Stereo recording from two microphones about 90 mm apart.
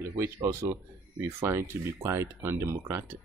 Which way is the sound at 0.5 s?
30° right (ahead or behind).